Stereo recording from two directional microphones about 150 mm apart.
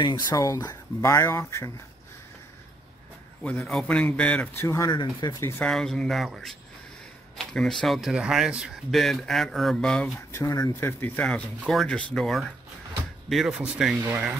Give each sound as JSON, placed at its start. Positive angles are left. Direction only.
{"t": 0.0, "sound": "speech", "side_deg": 25}
{"t": 3.4, "sound": "a man's voice", "side_deg": 5}
{"t": 4.6, "sound": "speech", "side_deg": 20}
{"t": 5.4, "sound": "a man's voice", "side_deg": 15}
{"t": 5.7, "sound": "speech", "side_deg": 5}
{"t": 10.3, "sound": "speech", "side_deg": 25}
{"t": 10.8, "sound": "speech", "side_deg": 15}